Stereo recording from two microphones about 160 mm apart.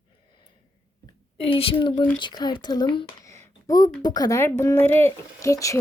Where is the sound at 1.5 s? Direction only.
35° left (ahead or behind).